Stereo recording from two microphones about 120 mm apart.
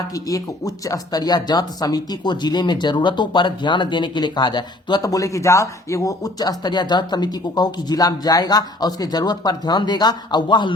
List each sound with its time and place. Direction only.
0.1 s speech: 30° left (ahead or behind)